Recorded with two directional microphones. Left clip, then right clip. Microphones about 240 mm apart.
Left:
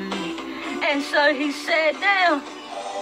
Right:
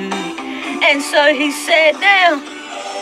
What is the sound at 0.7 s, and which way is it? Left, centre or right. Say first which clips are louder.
Speech: right 8 dB; centre.